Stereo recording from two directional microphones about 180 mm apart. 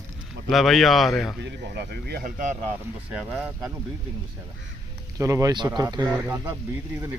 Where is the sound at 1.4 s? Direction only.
70° right (ahead or behind); by 2.6 s 45° right (ahead or behind).